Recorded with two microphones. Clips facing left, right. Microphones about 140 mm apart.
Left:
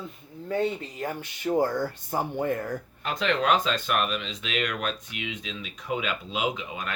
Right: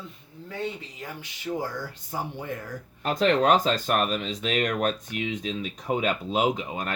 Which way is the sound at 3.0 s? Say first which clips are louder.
Right 5 dB; 40° right (ahead or behind).